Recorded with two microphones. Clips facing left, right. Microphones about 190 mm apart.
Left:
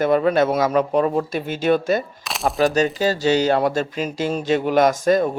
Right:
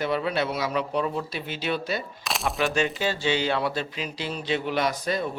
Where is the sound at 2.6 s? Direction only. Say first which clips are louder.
Left 8 dB; 40° left (ahead or behind).